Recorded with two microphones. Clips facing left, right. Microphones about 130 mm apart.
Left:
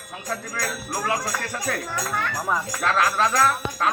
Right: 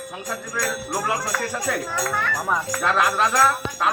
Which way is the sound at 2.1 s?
5° right (ahead or behind).